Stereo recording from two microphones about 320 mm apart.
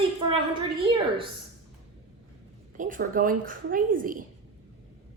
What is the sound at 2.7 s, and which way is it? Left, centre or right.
A woman's voice, right.